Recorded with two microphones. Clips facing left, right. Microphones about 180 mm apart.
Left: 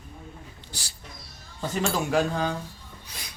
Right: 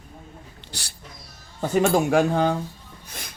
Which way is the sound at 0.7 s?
65° right (ahead or behind).